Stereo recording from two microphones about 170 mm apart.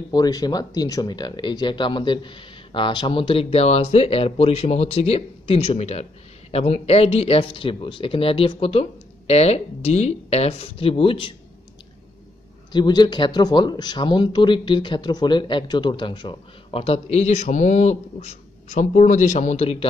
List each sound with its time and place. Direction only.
0.1 s speech: 20° left (ahead or behind)
12.7 s speech: 25° left (ahead or behind)